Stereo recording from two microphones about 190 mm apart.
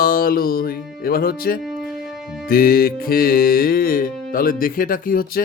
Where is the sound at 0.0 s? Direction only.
50° left (ahead or behind).